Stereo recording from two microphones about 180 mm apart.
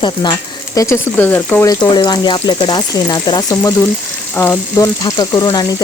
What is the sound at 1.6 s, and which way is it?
Speech, 20° left (ahead or behind).